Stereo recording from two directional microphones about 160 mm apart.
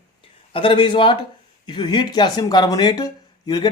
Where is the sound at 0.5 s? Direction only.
30° left (ahead or behind).